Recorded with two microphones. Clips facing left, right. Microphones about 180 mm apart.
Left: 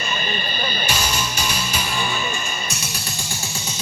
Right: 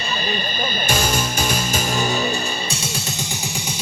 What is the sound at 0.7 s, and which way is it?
Music, 45° right (ahead or behind).